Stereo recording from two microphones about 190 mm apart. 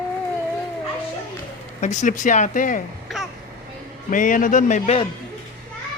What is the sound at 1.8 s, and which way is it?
Speech, 40° left (ahead or behind).